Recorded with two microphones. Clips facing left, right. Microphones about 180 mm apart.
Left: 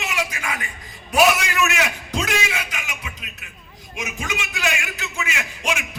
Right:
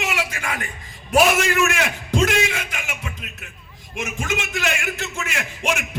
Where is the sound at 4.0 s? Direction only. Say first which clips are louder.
Right 3 dB; 55° right (ahead or behind).